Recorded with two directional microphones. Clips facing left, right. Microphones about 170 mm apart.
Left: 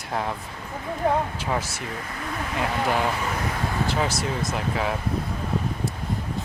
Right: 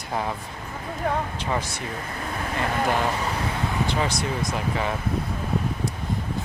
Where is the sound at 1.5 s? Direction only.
5° left (ahead or behind).